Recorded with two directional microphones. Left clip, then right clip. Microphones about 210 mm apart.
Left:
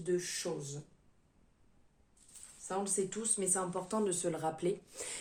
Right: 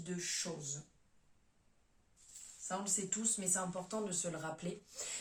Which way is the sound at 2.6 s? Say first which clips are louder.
Left 4 dB; 45° left (ahead or behind).